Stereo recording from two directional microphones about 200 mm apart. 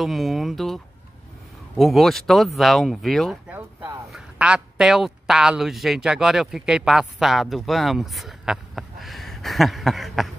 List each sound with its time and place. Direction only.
0.0 s speech: centre (ahead or behind)
1.8 s speech: centre (ahead or behind)